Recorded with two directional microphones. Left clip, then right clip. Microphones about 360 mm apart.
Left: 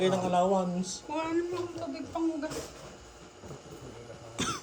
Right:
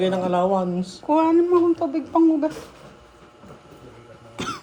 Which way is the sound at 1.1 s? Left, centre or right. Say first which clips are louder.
Right 15 dB; centre.